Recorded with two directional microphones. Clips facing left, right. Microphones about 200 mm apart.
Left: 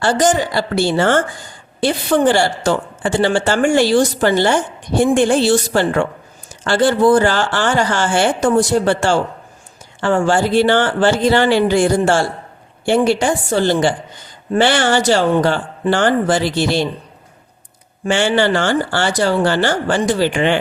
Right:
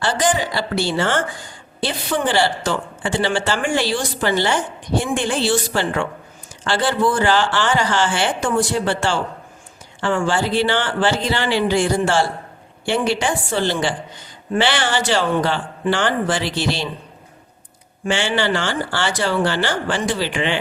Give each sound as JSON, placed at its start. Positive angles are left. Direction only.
{"t": 0.0, "sound": "speech", "side_deg": 45}
{"t": 18.0, "sound": "speech", "side_deg": 45}